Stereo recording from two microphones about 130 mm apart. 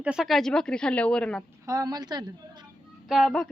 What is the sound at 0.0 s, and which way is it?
Speech, 5° right (ahead or behind).